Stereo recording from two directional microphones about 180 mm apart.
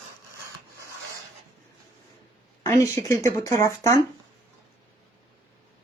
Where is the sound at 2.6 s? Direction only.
15° left (ahead or behind).